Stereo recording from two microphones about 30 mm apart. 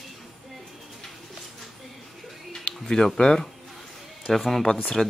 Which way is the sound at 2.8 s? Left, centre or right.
Left.